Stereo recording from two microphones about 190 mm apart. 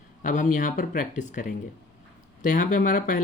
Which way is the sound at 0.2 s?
45° left (ahead or behind).